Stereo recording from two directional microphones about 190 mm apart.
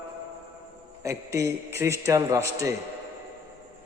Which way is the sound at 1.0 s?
15° right (ahead or behind).